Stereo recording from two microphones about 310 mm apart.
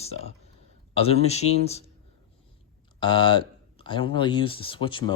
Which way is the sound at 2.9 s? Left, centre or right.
Centre.